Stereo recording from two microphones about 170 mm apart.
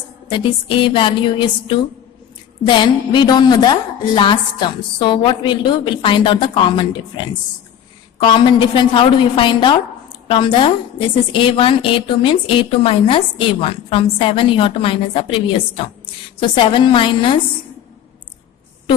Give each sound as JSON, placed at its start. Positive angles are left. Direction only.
{"t": 0.3, "sound": "a woman's voice", "side_deg": 30}